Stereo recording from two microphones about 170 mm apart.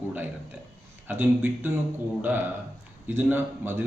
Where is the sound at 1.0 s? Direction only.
10° right (ahead or behind).